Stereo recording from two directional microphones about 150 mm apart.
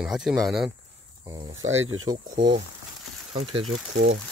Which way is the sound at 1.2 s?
20° right (ahead or behind).